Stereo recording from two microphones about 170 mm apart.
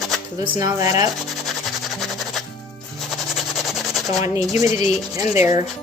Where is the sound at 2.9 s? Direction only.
Centre (ahead or behind).